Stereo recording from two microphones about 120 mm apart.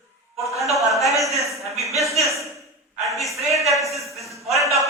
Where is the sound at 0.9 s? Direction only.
Centre (ahead or behind).